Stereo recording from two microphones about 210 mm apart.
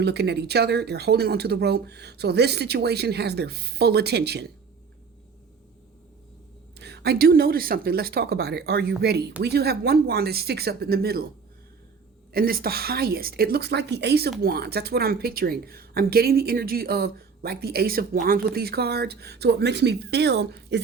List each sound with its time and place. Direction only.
0.0 s a woman's voice: 50° right (ahead or behind)
6.7 s a woman's voice: 50° right (ahead or behind)
12.3 s a woman's voice: 45° right (ahead or behind)